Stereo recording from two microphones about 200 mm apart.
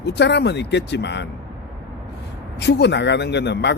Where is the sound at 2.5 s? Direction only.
60° left (ahead or behind).